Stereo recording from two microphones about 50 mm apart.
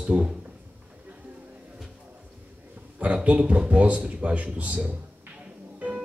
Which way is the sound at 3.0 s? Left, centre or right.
Right.